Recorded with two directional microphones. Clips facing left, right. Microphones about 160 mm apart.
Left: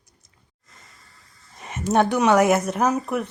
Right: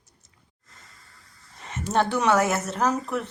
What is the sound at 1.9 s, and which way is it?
Speech, 15° left (ahead or behind).